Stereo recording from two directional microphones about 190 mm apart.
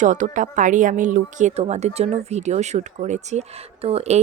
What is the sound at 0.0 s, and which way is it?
Speech, 40° right (ahead or behind).